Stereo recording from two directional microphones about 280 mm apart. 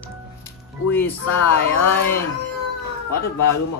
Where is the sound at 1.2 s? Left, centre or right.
Left.